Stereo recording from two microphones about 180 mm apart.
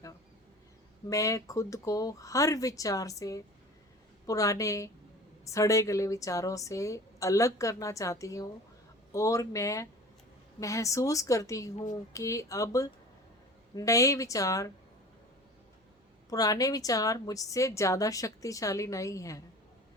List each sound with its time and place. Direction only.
1.1 s a woman's voice: 20° left (ahead or behind)
16.3 s a woman's voice: 20° left (ahead or behind)